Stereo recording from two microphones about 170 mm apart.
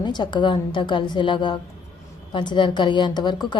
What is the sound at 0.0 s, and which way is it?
Speech, 25° left (ahead or behind).